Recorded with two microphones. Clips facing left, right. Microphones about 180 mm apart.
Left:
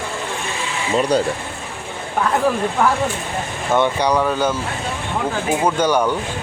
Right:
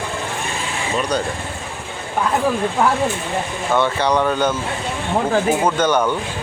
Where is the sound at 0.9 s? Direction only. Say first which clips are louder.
Left 4 dB; 30° left (ahead or behind).